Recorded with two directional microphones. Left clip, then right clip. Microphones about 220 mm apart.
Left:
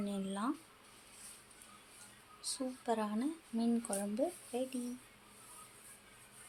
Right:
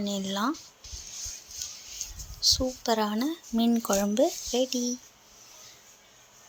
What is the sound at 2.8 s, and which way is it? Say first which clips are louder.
Speech: right 8 dB; 35° right (ahead or behind).